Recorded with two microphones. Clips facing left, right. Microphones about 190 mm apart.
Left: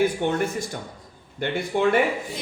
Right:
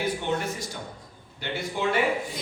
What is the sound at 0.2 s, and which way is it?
Speech, 50° left (ahead or behind).